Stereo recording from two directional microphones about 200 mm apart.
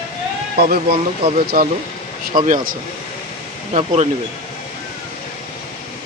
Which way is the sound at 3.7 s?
30° right (ahead or behind).